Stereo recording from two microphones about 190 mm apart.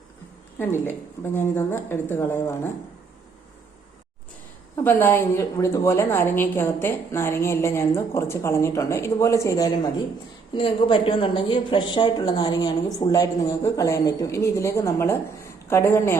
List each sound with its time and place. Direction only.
0.6 s a woman's voice: 10° left (ahead or behind)
4.8 s a woman's voice: 10° left (ahead or behind)